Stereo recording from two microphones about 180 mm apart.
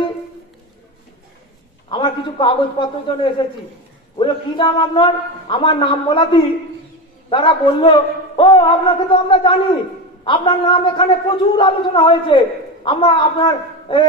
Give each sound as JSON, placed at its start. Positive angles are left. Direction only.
{"t": 1.9, "sound": "a man's voice", "side_deg": 25}